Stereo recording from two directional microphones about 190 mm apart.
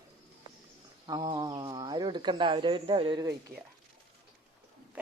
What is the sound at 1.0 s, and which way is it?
Speech, 20° right (ahead or behind).